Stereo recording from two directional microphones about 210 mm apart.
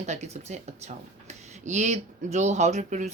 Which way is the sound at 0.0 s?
35° right (ahead or behind).